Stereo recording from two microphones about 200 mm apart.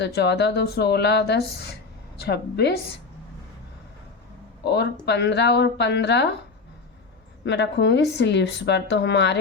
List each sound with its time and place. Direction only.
0.0 s speech: 55° left (ahead or behind)
4.6 s speech: 55° left (ahead or behind)
7.4 s speech: 60° left (ahead or behind)